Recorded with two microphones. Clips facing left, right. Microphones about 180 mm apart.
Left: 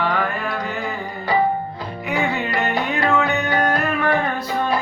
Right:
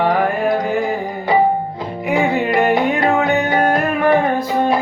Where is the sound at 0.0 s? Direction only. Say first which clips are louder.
Right 7 dB; 45° right (ahead or behind).